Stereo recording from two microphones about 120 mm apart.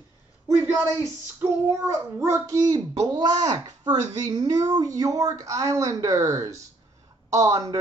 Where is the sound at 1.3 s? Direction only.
20° right (ahead or behind).